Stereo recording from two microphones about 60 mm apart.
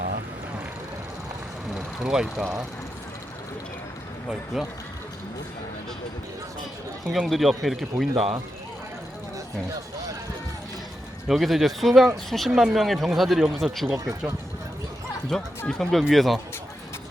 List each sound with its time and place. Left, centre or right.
1.7 s vehicle: centre
4.5 s speech: centre
7.3 s speech: centre
11.3 s speech: centre
15.3 s speech: centre